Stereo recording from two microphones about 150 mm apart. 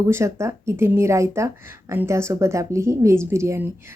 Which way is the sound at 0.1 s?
20° right (ahead or behind).